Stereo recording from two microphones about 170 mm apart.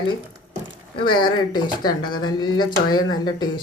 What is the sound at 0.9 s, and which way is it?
Speech, 60° left (ahead or behind).